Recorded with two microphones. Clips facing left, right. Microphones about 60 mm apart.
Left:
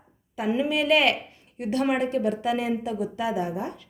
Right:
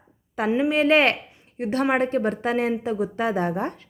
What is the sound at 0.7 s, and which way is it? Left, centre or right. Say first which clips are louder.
A woman's voice: right 2 dB; right.